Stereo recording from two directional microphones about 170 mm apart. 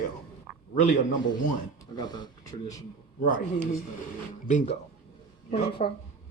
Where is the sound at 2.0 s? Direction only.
25° left (ahead or behind).